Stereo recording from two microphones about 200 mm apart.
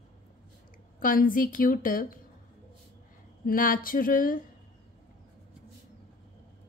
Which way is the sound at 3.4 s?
45° left (ahead or behind).